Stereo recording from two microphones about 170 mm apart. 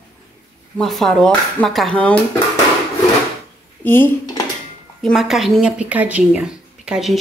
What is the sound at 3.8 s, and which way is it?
Speech, 10° left (ahead or behind).